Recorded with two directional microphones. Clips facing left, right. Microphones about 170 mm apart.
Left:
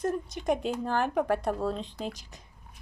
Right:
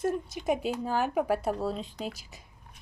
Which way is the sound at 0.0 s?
5° right (ahead or behind).